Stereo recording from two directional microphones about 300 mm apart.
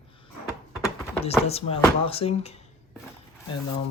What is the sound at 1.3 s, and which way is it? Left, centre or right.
Speech, centre.